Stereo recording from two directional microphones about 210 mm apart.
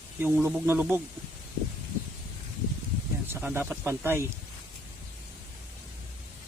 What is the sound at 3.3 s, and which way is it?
Speech, 10° right (ahead or behind).